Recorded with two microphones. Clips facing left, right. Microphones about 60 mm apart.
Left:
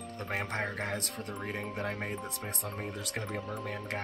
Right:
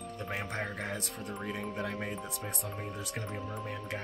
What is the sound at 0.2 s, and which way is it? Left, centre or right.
Speech, left.